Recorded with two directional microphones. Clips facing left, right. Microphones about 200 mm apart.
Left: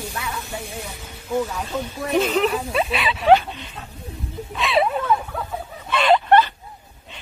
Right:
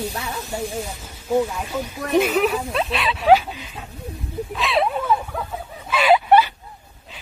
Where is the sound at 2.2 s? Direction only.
5° right (ahead or behind).